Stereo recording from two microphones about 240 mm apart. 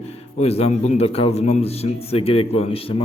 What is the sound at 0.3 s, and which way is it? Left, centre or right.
A man's voice, left.